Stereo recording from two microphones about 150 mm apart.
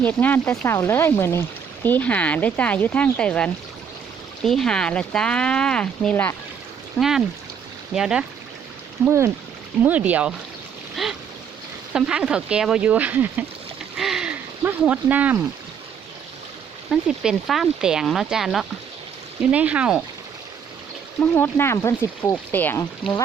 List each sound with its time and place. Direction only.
0.0 s speech: 10° left (ahead or behind)
7.9 s speech: 5° right (ahead or behind)
9.0 s speech: 20° right (ahead or behind)
11.0 s a sound: centre (ahead or behind)
11.9 s speech: 5° right (ahead or behind)
13.9 s a sound: 5° right (ahead or behind)
14.6 s speech: 10° right (ahead or behind)
16.9 s speech: centre (ahead or behind)
21.2 s speech: 15° left (ahead or behind)